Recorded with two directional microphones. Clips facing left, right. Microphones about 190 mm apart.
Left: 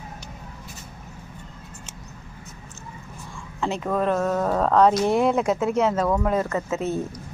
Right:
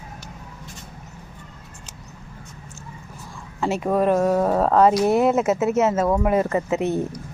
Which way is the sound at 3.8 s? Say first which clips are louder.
Right 4 dB; 15° right (ahead or behind).